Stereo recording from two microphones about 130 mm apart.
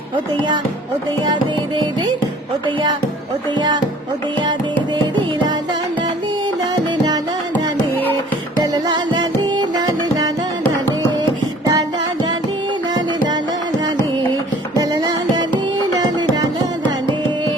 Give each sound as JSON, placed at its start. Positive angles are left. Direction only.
{"t": 3.5, "sound": "speech", "side_deg": -35}
{"t": 4.4, "sound": "carnatic music", "side_deg": -35}
{"t": 8.6, "sound": "music", "side_deg": -30}
{"t": 11.6, "sound": "music", "side_deg": -30}
{"t": 14.8, "sound": "music", "side_deg": -30}
{"t": 16.8, "sound": "carnatic music", "side_deg": -40}